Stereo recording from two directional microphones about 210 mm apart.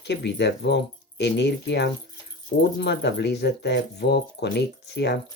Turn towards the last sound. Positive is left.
turn(degrees=55)  # may be behind; listen again after turning